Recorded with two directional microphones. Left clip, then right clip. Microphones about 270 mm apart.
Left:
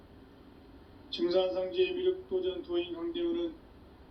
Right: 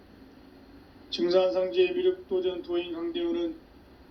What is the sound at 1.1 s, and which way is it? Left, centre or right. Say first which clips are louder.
A man's voice: right 5 dB; right.